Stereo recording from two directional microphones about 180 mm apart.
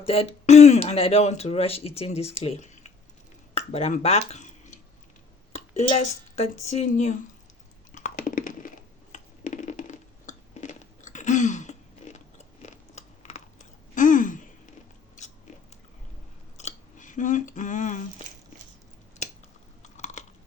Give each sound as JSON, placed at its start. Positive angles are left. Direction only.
{"t": 0.0, "sound": "speech", "side_deg": 35}
{"t": 3.5, "sound": "a sound", "side_deg": 35}
{"t": 5.5, "sound": "speech", "side_deg": 35}
{"t": 7.9, "sound": "computer keyboard", "side_deg": 45}
{"t": 9.1, "sound": "a sound", "side_deg": 45}
{"t": 16.6, "sound": "scissors", "side_deg": 40}
{"t": 19.8, "sound": "chewing", "side_deg": 40}